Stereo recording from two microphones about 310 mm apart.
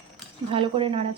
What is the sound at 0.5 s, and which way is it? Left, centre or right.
Speech, centre.